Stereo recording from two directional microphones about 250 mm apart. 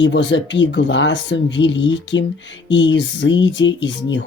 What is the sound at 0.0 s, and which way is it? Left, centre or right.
Speech, left.